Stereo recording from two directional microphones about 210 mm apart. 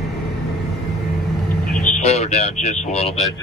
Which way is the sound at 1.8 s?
35° left (ahead or behind).